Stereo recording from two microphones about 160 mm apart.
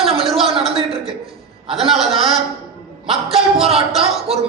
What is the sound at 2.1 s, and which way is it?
Speech, 35° right (ahead or behind).